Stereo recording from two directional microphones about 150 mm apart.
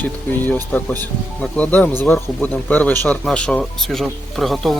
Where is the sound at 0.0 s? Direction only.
10° left (ahead or behind).